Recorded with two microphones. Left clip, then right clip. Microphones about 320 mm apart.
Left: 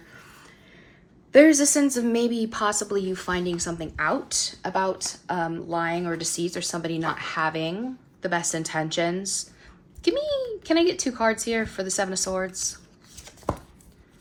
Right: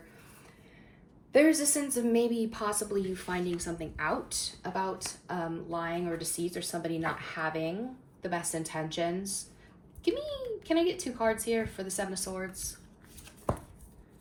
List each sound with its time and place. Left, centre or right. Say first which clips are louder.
1.3 s speech: left 9 dB; left